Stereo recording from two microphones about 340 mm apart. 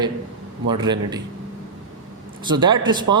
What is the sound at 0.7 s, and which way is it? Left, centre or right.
Speech, centre.